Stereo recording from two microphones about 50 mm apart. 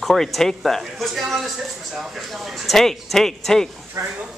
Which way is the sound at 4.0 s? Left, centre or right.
Right.